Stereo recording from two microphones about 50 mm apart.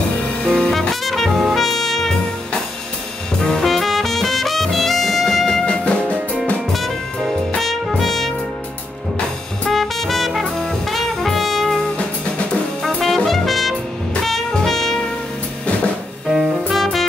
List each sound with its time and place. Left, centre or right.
0.5 s music: centre
3.3 s music: centre
5.7 s music: centre
7.5 s music: centre
9.7 s music: centre
12.8 s music: centre
16.7 s music: centre